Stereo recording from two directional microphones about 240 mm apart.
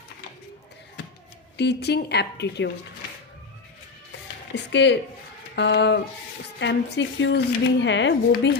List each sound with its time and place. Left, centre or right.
1.5 s speech: left
4.5 s speech: left